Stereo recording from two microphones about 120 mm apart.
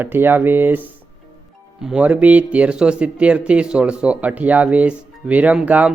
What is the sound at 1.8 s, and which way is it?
Speech, 10° right (ahead or behind).